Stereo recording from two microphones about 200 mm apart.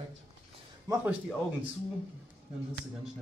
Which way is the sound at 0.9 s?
20° right (ahead or behind).